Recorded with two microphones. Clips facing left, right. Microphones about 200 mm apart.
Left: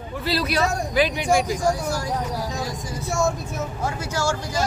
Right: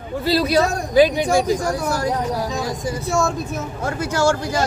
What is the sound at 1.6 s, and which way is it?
Speech, 65° right (ahead or behind).